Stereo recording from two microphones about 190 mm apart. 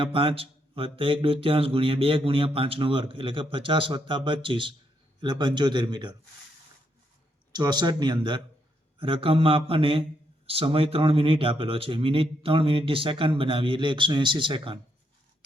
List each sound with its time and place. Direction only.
0.0 s a man's voice: 25° right (ahead or behind)
7.5 s a man's voice: 20° right (ahead or behind)